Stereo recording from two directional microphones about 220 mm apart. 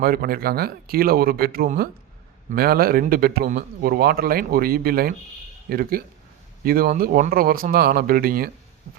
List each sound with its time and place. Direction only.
0.0 s speech: 45° right (ahead or behind)